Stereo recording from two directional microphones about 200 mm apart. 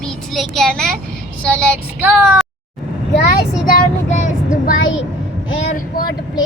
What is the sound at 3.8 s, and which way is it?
Child singing, 40° left (ahead or behind).